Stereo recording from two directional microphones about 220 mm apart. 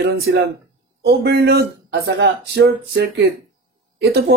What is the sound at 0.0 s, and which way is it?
Speech, 45° right (ahead or behind).